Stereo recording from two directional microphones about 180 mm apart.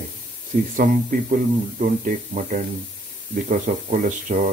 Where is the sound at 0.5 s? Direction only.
50° right (ahead or behind).